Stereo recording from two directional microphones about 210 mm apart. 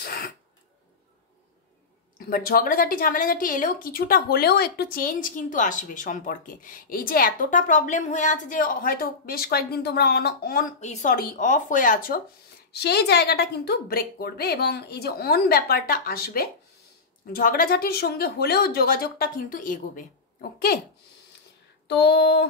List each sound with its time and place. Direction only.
0.0 s throat clearing: 45° left (ahead or behind)
2.1 s a woman's voice: 45° left (ahead or behind)
21.8 s speech: 55° left (ahead or behind)